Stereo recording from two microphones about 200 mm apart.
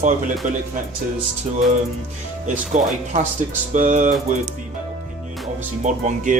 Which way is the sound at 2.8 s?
40° right (ahead or behind).